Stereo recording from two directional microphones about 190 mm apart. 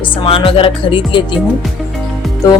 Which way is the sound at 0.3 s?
30° left (ahead or behind).